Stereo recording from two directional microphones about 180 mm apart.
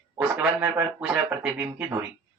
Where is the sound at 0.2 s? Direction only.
10° right (ahead or behind).